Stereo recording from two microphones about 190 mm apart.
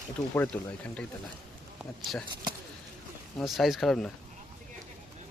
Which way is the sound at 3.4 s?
Centre (ahead or behind).